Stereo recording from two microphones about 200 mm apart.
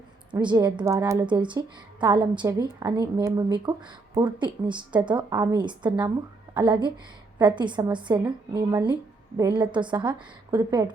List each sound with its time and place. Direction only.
0.3 s a woman's voice: 20° right (ahead or behind)